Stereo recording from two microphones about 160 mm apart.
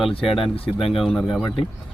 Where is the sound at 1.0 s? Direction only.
Centre (ahead or behind).